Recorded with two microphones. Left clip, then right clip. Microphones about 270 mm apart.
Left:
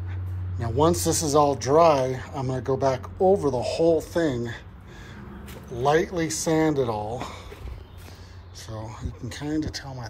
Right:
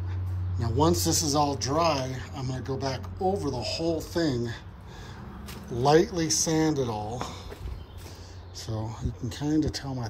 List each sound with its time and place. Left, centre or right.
0.6 s speech: centre
5.7 s speech: centre
8.5 s speech: centre
9.7 s speech: right